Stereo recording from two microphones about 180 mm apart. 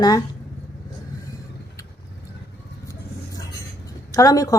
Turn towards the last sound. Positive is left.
turn(degrees=20)  # may be behind; listen again after turning